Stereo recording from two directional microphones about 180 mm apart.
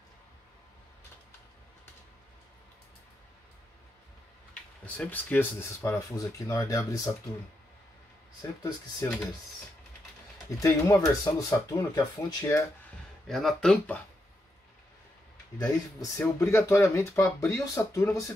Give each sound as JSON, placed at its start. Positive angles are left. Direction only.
{"t": 4.8, "sound": "speech", "side_deg": 10}
{"t": 8.4, "sound": "speech", "side_deg": 20}
{"t": 10.6, "sound": "speech", "side_deg": 20}
{"t": 13.3, "sound": "speech", "side_deg": 0}
{"t": 16.0, "sound": "speech", "side_deg": 15}